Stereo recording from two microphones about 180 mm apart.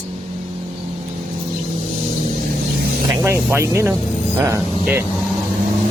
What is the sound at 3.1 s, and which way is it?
Speech, 15° right (ahead or behind).